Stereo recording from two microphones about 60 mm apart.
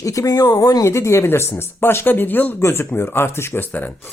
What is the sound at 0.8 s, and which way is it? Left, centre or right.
Speech, left.